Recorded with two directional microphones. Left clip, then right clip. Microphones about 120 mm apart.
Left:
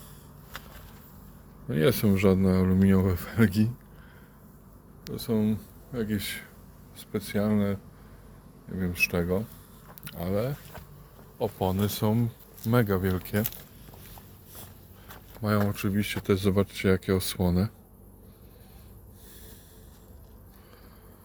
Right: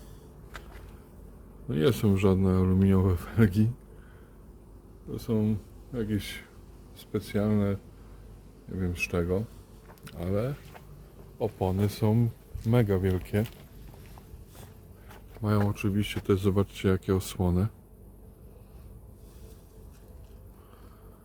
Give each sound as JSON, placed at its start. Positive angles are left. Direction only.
{"t": 1.6, "sound": "speech", "side_deg": -15}
{"t": 5.1, "sound": "speech", "side_deg": -15}
{"t": 15.4, "sound": "speech", "side_deg": -10}